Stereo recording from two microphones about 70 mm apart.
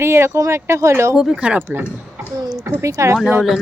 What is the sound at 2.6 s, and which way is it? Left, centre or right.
Speech, right.